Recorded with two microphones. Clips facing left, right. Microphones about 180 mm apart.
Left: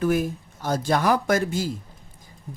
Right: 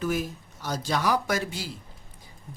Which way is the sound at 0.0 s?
50° left (ahead or behind).